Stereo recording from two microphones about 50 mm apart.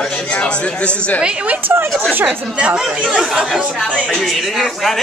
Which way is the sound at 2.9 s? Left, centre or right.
Right.